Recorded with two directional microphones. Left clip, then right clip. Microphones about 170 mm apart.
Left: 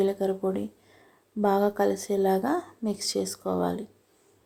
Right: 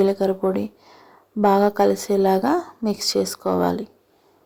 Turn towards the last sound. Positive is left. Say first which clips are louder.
# right 7 dB
turn(degrees=-20)  # may be behind; listen again after turning